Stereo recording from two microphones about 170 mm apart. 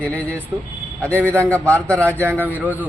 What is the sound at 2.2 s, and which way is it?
Speech, 10° right (ahead or behind).